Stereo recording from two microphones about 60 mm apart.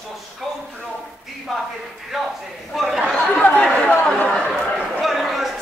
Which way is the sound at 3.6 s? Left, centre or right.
Centre.